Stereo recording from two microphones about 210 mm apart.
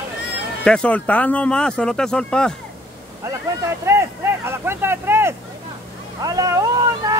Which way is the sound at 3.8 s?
10° right (ahead or behind).